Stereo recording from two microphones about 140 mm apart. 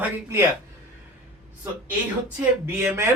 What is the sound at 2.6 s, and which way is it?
Speech, 15° right (ahead or behind).